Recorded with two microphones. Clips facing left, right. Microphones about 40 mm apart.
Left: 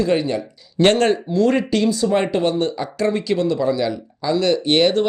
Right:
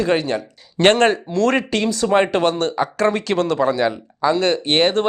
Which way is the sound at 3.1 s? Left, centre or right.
Right.